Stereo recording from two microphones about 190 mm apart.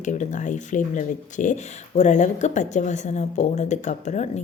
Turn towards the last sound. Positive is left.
turn(degrees=40)  # may be behind; listen again after turning